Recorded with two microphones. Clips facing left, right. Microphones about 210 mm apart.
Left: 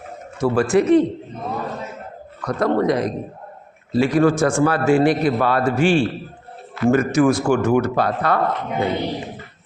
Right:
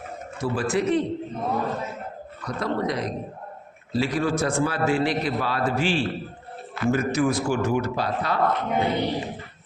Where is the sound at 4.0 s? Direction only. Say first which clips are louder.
Left 8 dB; 55° left (ahead or behind).